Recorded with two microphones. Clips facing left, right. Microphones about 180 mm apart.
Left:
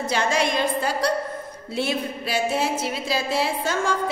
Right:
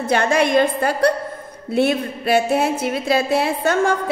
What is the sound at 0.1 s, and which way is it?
A woman's voice, 55° right (ahead or behind).